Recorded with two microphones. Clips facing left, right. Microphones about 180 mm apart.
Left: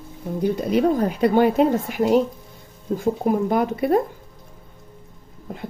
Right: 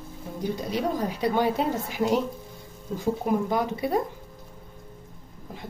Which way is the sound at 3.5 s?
55° left (ahead or behind).